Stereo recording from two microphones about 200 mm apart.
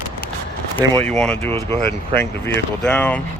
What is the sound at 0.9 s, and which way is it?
Speech, 5° left (ahead or behind).